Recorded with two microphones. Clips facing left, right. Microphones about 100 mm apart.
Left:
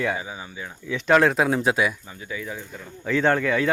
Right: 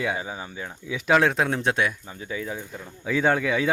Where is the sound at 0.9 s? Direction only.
5° right (ahead or behind).